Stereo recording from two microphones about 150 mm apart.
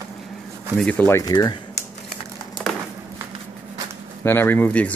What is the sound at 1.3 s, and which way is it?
Speech, 30° left (ahead or behind).